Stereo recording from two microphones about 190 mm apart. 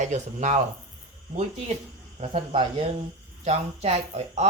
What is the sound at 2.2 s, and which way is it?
Speech, 30° right (ahead or behind).